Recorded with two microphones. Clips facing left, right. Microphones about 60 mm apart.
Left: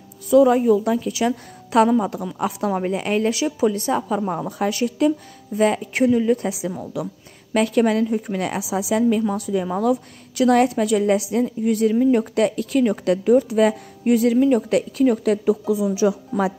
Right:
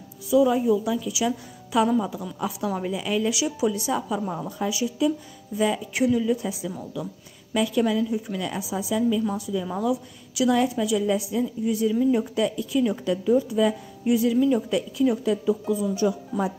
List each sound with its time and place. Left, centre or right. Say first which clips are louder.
0.3 s a woman's voice: left 5 dB; left
4.5 s a woman's voice: left 5 dB; left
5.9 s a woman's voice: left 4 dB; left
6.8 s a woman's voice: left 5 dB; left
8.5 s a woman's voice: left 6 dB; left
9.4 s a woman's voice: left 5 dB; left
11.4 s a woman's voice: left 5 dB; left
14.0 s a woman's voice: left 4 dB; left
14.7 s a woman's voice: left 5 dB; left